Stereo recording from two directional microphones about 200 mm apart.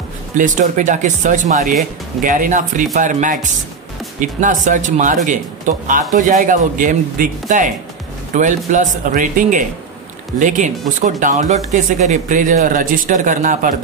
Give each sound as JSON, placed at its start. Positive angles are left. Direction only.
{"t": 0.4, "sound": "speech", "side_deg": -40}